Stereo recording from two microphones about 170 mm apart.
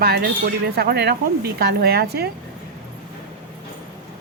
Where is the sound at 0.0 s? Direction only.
65° right (ahead or behind).